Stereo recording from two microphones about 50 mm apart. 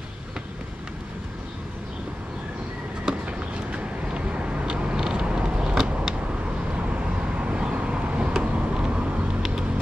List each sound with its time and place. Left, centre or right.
3.1 s vehicle: right